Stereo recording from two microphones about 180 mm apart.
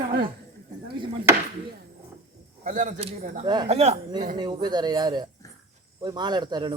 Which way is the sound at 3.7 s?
35° right (ahead or behind).